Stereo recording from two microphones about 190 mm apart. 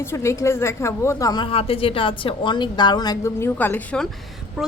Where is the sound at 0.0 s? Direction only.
15° left (ahead or behind).